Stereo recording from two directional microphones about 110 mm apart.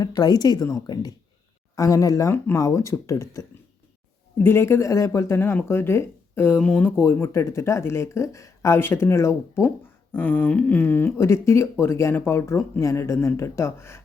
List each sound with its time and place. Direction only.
0.0 s speech: 35° left (ahead or behind); by 6.9 s 10° left (ahead or behind)
6.9 s speech: 25° left (ahead or behind)